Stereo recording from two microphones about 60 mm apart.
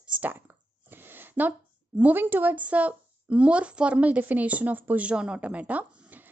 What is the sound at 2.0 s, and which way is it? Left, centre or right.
Speech, right.